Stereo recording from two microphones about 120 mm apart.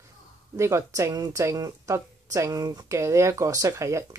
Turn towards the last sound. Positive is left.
turn(degrees=-25)  # may be behind; listen again after turning